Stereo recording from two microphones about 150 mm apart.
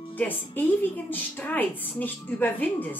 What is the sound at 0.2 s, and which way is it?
A woman's voice, 10° left (ahead or behind).